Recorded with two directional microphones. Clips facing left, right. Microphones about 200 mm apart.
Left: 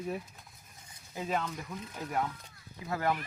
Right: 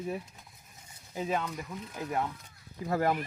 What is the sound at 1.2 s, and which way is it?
Speech, 10° right (ahead or behind).